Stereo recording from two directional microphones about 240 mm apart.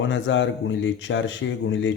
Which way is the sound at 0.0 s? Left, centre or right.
Left.